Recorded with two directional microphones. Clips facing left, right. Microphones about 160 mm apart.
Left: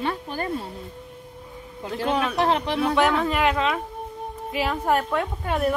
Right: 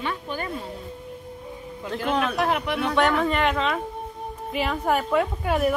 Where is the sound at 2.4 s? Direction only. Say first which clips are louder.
Left 2 dB; 30° left (ahead or behind).